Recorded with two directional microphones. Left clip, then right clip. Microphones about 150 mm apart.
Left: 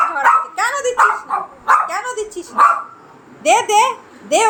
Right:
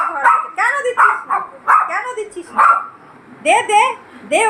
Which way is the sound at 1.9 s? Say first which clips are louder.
Right 1 dB; 20° left (ahead or behind).